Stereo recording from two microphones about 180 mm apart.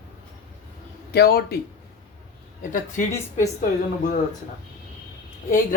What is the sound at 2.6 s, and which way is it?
Speech, 45° left (ahead or behind).